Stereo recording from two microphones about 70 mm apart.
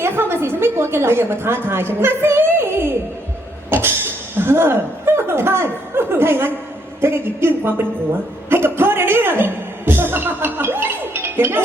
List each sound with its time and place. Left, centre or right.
0.0 s a woman's voice: right
1.6 s a sound: right
3.7 s chuckle: right
7.0 s a woman's voice: right
8.4 s music: right